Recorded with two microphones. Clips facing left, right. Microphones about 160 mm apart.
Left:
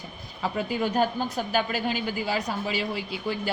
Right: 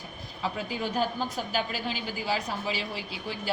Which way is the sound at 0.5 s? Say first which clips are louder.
Left 7 dB; 55° left (ahead or behind).